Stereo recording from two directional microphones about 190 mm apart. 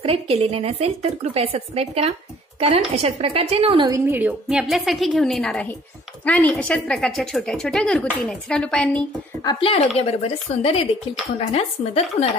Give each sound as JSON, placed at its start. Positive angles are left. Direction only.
{"t": 0.0, "sound": "speech", "side_deg": -30}
{"t": 4.0, "sound": "speech", "side_deg": -10}
{"t": 9.4, "sound": "speech", "side_deg": 25}